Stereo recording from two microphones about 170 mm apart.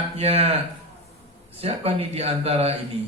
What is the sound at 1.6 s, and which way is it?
A man's voice, 35° right (ahead or behind).